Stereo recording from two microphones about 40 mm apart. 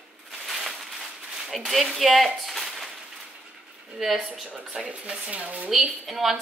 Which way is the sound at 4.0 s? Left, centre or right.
Centre.